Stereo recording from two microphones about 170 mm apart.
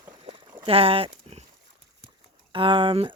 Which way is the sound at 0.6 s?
35° right (ahead or behind).